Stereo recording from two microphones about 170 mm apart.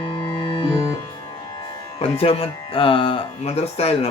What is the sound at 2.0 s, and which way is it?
Speech, 35° left (ahead or behind).